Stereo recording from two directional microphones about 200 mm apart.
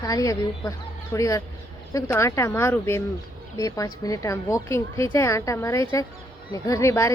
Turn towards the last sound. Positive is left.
turn(degrees=15)  # may be behind; listen again after turning